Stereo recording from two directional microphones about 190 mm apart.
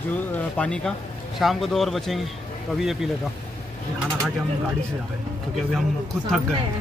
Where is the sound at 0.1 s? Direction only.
5° left (ahead or behind).